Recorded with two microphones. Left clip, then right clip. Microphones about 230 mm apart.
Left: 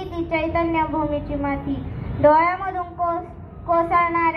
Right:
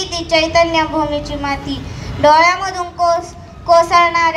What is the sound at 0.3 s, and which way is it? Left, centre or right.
Speech, right.